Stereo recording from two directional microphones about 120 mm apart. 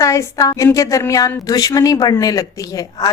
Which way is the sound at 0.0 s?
25° left (ahead or behind).